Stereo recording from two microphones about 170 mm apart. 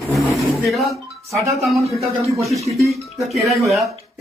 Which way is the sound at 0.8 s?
15° right (ahead or behind).